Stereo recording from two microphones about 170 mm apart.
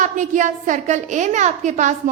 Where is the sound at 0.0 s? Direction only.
50° right (ahead or behind).